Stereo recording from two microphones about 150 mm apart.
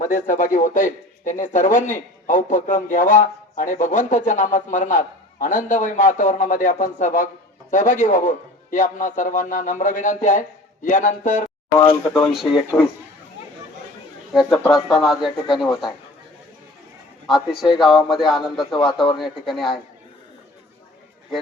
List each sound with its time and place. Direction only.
0.0 s speech: 60° left (ahead or behind)
12.2 s a man's voice: centre (ahead or behind)
14.7 s a man's voice: centre (ahead or behind)
17.2 s a man's voice: centre (ahead or behind)